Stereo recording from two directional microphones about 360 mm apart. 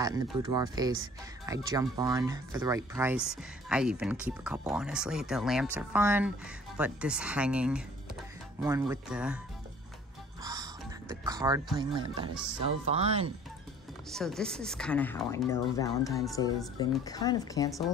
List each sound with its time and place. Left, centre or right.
0.0 s speech: centre
10.4 s music: centre
12.6 s speech: centre
14.1 s speech: centre